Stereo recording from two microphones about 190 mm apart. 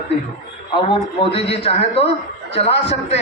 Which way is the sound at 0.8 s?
30° left (ahead or behind).